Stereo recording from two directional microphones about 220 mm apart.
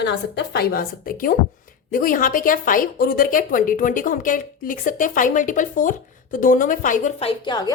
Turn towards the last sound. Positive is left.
turn(degrees=15)  # may be behind; listen again after turning